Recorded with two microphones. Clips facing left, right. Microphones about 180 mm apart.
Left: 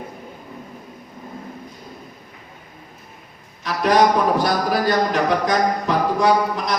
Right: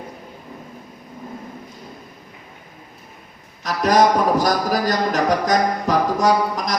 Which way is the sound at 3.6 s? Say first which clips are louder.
Even; 40° right (ahead or behind).